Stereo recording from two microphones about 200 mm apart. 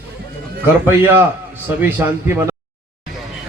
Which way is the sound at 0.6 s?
10° right (ahead or behind).